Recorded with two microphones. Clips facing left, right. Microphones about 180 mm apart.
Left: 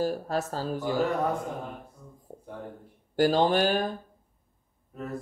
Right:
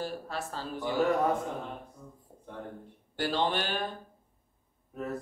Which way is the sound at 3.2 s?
40° left (ahead or behind).